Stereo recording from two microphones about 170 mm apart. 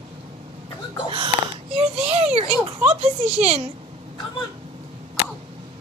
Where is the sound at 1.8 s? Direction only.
35° right (ahead or behind).